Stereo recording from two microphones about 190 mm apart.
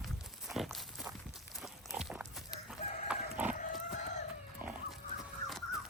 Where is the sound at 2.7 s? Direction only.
5° right (ahead or behind).